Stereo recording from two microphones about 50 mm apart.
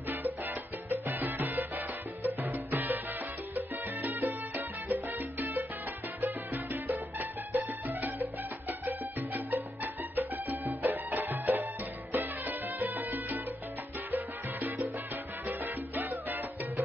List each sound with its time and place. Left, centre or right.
0.8 s music: right
3.5 s salsa music: right
6.2 s music: right
14.1 s salsa music: right